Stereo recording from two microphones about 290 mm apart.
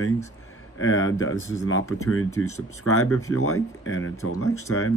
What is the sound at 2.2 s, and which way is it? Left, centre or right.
Speech, centre.